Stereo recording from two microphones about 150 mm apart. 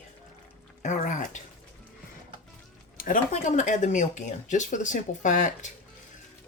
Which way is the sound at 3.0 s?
60° left (ahead or behind).